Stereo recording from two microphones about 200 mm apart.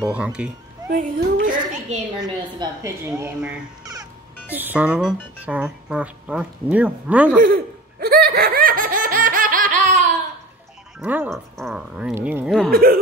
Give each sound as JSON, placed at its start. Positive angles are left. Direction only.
{"t": 0.0, "sound": "speech", "side_deg": -5}
{"t": 0.8, "sound": "a child's voice", "side_deg": -45}
{"t": 3.2, "sound": "speech", "side_deg": -5}
{"t": 3.8, "sound": "speech", "side_deg": -20}
{"t": 7.4, "sound": "laughter", "side_deg": -50}
{"t": 11.0, "sound": "speech", "side_deg": -5}
{"t": 12.4, "sound": "speech", "side_deg": 0}
{"t": 12.7, "sound": "speech", "side_deg": -50}